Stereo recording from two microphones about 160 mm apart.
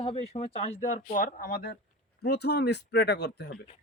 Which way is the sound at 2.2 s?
90° left.